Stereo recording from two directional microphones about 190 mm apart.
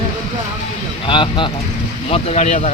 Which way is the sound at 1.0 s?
25° left (ahead or behind).